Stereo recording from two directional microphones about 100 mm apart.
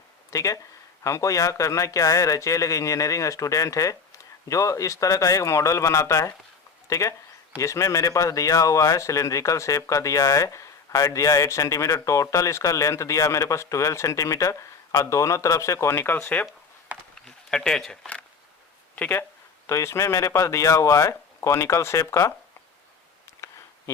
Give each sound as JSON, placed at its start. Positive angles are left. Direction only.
{"t": 0.3, "sound": "speech", "side_deg": 35}
{"t": 17.2, "sound": "speech", "side_deg": 5}
{"t": 18.9, "sound": "speech", "side_deg": 15}
{"t": 19.6, "sound": "speech", "side_deg": 30}